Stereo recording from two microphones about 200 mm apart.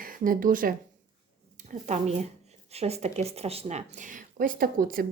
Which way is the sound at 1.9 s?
35° right (ahead or behind).